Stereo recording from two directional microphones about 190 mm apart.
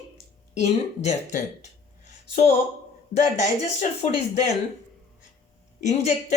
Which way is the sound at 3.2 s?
35° left (ahead or behind).